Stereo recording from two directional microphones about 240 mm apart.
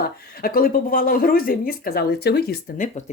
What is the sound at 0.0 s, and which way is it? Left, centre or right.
A woman's voice, left.